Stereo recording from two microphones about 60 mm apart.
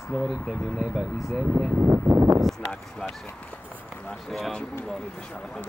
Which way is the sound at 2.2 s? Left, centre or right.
Centre.